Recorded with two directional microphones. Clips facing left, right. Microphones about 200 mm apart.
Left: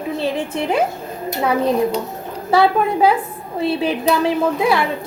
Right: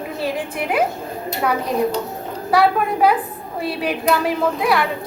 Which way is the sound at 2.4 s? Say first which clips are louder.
Left 2 dB; 25° left (ahead or behind).